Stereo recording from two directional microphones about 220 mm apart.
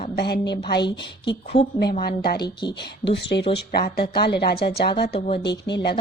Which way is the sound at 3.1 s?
50° left (ahead or behind).